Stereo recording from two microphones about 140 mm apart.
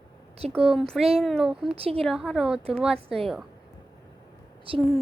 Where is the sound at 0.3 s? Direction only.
45° right (ahead or behind).